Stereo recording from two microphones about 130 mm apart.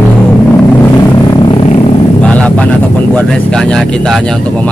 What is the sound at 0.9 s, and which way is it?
Vehicle, 35° left (ahead or behind).